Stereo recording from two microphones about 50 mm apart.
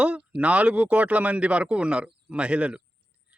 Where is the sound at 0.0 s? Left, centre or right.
Right.